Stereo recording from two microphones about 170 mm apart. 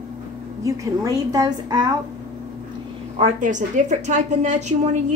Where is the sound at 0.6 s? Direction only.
20° right (ahead or behind).